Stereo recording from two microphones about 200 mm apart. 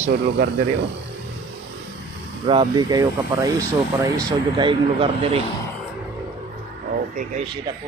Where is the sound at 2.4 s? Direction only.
20° right (ahead or behind).